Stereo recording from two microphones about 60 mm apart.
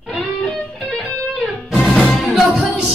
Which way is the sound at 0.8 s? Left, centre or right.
Centre.